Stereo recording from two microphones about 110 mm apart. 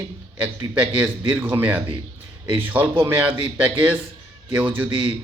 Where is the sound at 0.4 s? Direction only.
15° right (ahead or behind).